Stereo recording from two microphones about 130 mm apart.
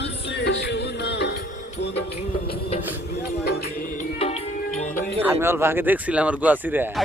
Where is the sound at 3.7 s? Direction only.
90° left.